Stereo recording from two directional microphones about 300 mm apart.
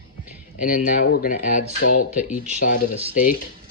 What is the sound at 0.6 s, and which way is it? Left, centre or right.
Speech, left.